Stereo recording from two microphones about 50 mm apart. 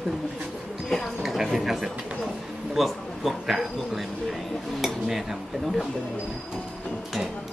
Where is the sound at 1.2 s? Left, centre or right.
Centre.